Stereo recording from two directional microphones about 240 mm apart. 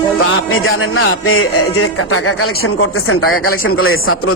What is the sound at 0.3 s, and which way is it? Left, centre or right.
A man's voice, left.